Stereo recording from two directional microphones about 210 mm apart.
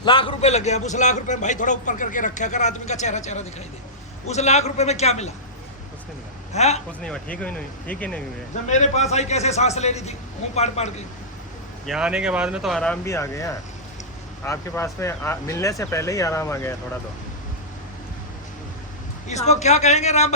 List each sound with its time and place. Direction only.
0.0 s a man's voice: 20° left (ahead or behind)
6.5 s a man's voice: 30° left (ahead or behind)
7.0 s speech: 5° left (ahead or behind)
8.6 s a man's voice: 35° left (ahead or behind)
11.9 s speech: 5° right (ahead or behind); by 16.7 s 15° left (ahead or behind)
19.3 s a man's voice: 30° left (ahead or behind)